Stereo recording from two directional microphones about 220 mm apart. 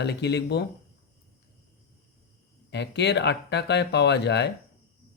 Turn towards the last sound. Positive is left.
turn(degrees=50)  # may be behind; listen again after turning